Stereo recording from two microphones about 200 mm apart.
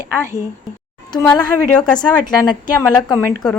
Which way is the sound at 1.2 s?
10° left (ahead or behind).